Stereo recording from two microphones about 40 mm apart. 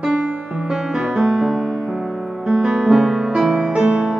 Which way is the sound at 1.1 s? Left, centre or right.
Centre.